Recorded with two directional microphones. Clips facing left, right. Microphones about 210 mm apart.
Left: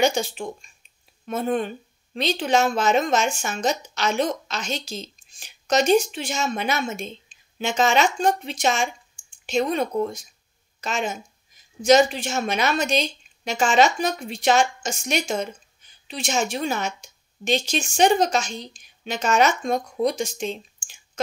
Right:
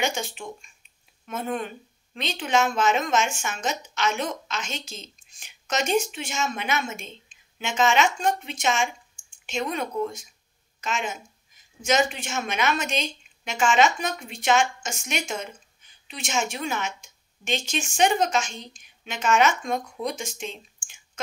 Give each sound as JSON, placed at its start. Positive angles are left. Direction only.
{"t": 0.0, "sound": "a woman's voice", "side_deg": 35}